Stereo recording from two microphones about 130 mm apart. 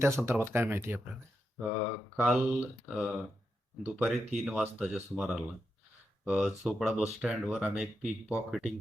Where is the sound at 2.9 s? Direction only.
Centre (ahead or behind).